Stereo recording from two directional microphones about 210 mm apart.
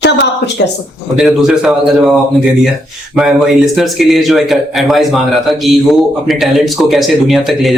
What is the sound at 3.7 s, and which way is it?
A man's voice, centre (ahead or behind).